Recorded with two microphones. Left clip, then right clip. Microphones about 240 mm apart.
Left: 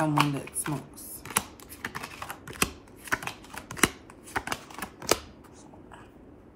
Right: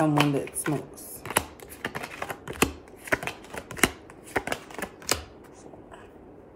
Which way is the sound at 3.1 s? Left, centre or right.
Centre.